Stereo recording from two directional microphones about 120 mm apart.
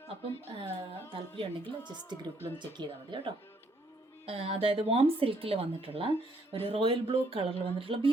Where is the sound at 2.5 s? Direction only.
40° right (ahead or behind).